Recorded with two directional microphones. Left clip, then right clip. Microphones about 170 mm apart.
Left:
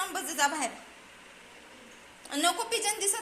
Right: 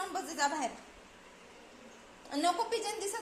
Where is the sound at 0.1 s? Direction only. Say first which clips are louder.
Left 4 dB; centre (ahead or behind).